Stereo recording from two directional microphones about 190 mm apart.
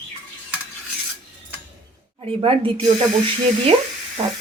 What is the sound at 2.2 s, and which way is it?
Speech, 30° right (ahead or behind).